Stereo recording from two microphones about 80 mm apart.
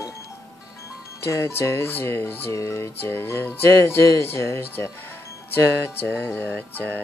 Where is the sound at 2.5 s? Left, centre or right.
Left.